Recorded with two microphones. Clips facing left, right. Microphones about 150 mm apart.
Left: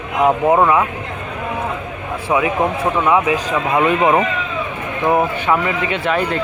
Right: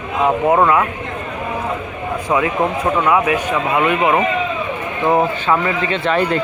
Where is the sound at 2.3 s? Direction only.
15° left (ahead or behind).